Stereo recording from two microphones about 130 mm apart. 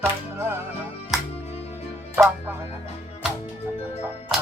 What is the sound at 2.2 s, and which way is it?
Music, 15° right (ahead or behind).